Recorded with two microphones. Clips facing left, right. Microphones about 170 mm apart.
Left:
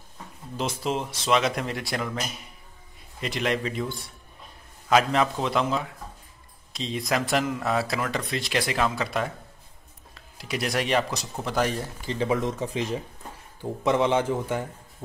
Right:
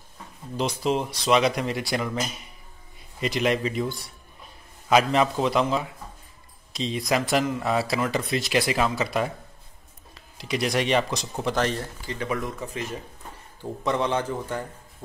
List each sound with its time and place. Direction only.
0.6 s speech: centre (ahead or behind)
11.8 s speech: 25° left (ahead or behind)
14.3 s a man's voice: 10° left (ahead or behind)